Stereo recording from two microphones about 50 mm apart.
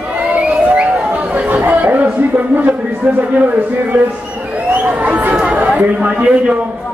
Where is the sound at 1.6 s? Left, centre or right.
Right.